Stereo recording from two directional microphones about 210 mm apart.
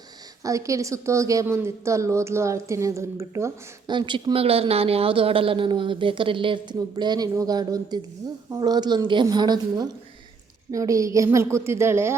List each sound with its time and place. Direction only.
0.4 s a woman's voice: 15° right (ahead or behind)